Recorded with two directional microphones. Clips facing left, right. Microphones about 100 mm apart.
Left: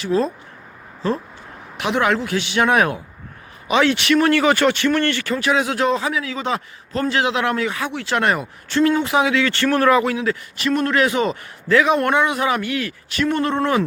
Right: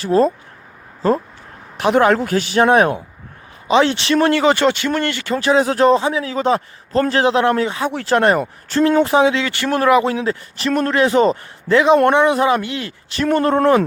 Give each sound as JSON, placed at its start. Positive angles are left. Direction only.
{"t": 0.0, "sound": "a man's voice", "side_deg": -40}
{"t": 1.8, "sound": "a man's voice", "side_deg": -40}
{"t": 5.4, "sound": "a man's voice", "side_deg": -35}
{"t": 13.2, "sound": "speech", "side_deg": -40}